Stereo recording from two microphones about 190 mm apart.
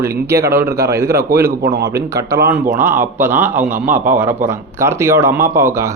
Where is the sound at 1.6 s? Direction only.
55° right (ahead or behind).